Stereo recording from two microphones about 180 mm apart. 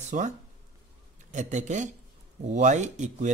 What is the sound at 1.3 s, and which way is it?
A man's voice, 45° right (ahead or behind).